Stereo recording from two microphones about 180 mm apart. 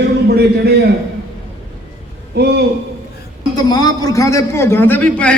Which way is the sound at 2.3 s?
65° right (ahead or behind).